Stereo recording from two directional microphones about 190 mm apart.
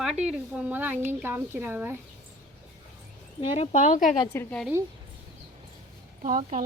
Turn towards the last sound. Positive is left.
turn(degrees=-40)  # may be behind; listen again after turning